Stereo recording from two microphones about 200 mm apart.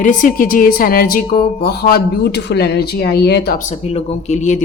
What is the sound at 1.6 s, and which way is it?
Speech, 50° left (ahead or behind).